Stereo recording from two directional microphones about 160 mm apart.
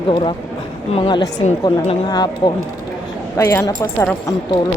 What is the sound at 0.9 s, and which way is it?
Speech, 30° left (ahead or behind).